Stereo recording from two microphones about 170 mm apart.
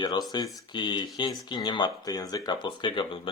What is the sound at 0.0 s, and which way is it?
Speech, 25° left (ahead or behind).